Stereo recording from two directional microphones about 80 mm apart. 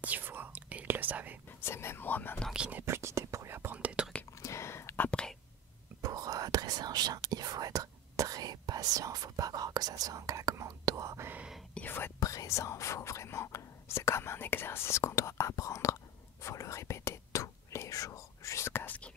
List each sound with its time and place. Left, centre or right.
0.0 s whispering: right
1.6 s speech: left
2.5 s speech: centre
2.8 s whispering: right
3.7 s whispering: centre
4.4 s a sound: left
5.9 s whispering: right
11.7 s whispering: left
12.2 s whispering: left